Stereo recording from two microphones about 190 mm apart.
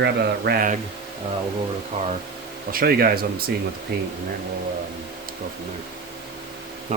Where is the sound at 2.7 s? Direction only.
50° right (ahead or behind).